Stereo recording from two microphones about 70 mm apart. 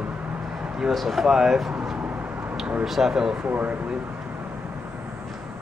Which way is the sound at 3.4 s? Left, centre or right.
Right.